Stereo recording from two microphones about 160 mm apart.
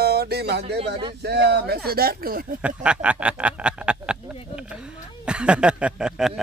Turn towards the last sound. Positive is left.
turn(degrees=-5)  # may be behind; listen again after turning